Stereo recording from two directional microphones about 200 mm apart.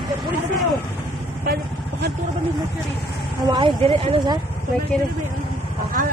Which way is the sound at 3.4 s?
25° right (ahead or behind).